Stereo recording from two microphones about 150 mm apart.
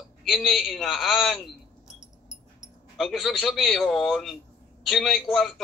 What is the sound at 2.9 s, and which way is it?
A man's voice, centre (ahead or behind).